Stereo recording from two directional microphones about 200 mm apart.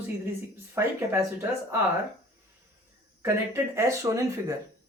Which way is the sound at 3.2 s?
15° right (ahead or behind).